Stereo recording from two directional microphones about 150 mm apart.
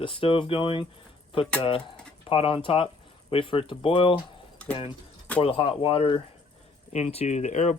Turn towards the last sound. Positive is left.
turn(degrees=50)  # may be behind; listen again after turning